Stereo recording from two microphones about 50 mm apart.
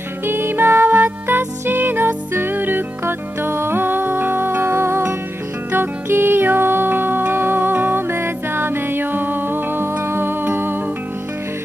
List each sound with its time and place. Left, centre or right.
0.3 s music: right
8.1 s music: right